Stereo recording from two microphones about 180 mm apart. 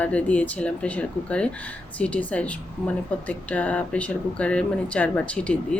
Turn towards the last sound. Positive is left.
turn(degrees=5)  # may be behind; listen again after turning